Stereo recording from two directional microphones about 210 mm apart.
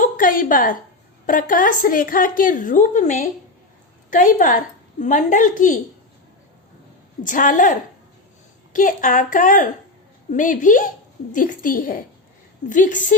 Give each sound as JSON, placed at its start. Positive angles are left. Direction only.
{"t": 0.0, "sound": "a sound", "side_deg": 40}
{"t": 1.3, "sound": "a woman's voice", "side_deg": 40}
{"t": 7.3, "sound": "a woman's voice", "side_deg": 40}